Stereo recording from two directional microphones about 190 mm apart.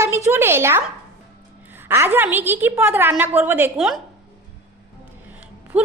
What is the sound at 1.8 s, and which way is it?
A woman's voice, 10° right (ahead or behind).